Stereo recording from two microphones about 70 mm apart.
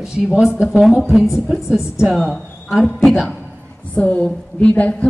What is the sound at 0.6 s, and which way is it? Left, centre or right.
A woman's voice, centre.